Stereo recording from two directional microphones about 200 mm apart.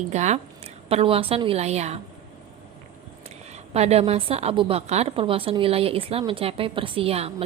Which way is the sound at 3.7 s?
30° right (ahead or behind).